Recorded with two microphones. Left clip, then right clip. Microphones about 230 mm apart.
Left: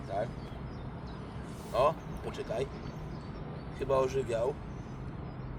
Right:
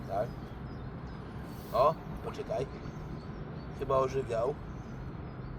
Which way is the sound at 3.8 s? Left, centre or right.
Centre.